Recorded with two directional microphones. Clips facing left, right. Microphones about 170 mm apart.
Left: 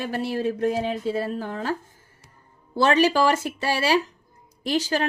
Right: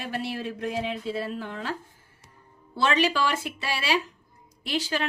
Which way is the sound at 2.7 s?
40° left (ahead or behind).